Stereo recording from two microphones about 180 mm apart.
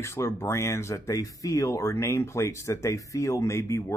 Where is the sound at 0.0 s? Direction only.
15° left (ahead or behind).